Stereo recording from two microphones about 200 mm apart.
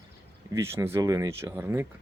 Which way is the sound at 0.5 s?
15° right (ahead or behind).